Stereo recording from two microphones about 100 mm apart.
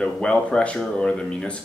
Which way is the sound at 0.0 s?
10° left (ahead or behind).